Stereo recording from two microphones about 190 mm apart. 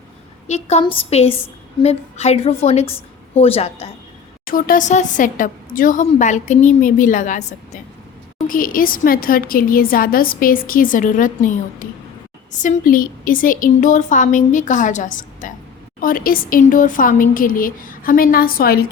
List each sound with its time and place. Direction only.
0.4 s a woman's voice: 35° left (ahead or behind)
4.4 s a woman's voice: 50° left (ahead or behind)